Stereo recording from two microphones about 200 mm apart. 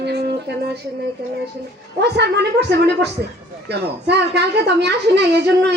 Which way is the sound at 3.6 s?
55° right (ahead or behind).